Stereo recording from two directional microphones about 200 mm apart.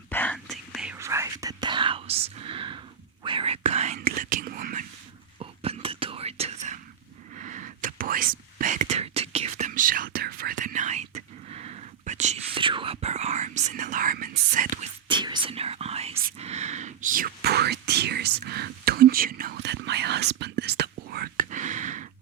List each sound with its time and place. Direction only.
0.1 s whispering: 10° left (ahead or behind)
0.9 s whispering: 15° right (ahead or behind); by 4.9 s 40° right (ahead or behind)
5.4 s whispering: 30° right (ahead or behind)
15.1 s whispering: 25° right (ahead or behind)